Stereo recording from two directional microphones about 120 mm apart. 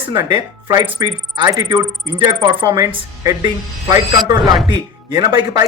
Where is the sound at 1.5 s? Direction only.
30° right (ahead or behind).